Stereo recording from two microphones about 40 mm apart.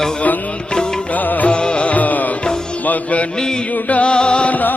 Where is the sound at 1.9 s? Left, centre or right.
Left.